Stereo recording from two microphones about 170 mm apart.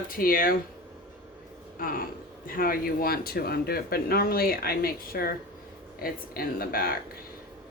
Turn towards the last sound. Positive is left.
turn(degrees=60)  # may be behind; listen again after turning